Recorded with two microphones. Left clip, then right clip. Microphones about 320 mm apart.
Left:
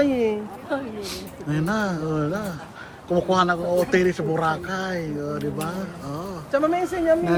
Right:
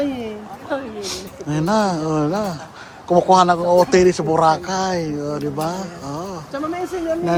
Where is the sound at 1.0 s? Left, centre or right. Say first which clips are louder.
Right 4 dB; centre.